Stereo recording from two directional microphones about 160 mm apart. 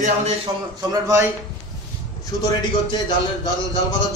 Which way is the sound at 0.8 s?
20° right (ahead or behind).